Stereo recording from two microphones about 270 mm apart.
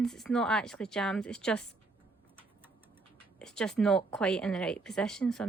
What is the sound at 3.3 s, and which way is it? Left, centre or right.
A woman's voice, centre.